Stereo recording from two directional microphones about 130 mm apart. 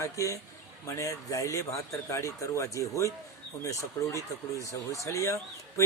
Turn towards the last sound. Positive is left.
turn(degrees=20)  # may be behind; listen again after turning